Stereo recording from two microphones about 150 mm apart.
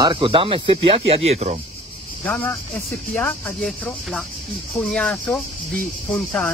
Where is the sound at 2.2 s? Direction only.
15° left (ahead or behind).